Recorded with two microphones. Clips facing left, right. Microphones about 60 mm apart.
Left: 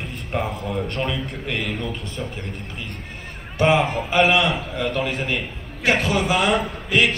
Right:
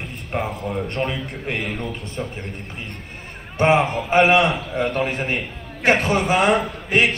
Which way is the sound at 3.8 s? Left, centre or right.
Centre.